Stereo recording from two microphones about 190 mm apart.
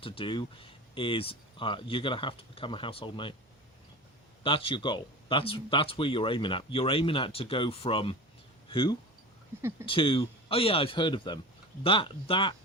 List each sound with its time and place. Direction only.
0.0 s speech: 25° left (ahead or behind)
4.4 s speech: 25° left (ahead or behind)